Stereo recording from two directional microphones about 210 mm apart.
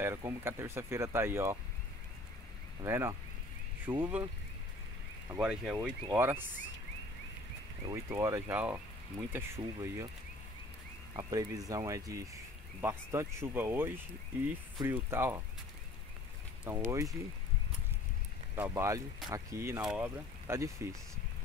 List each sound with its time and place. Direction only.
0.0 s speech: 10° right (ahead or behind)
2.8 s speech: 10° right (ahead or behind)
5.3 s speech: 5° right (ahead or behind)
7.8 s speech: 15° right (ahead or behind)
11.1 s speech: 15° right (ahead or behind)
16.6 s speech: 10° right (ahead or behind)
18.6 s speech: 15° right (ahead or behind)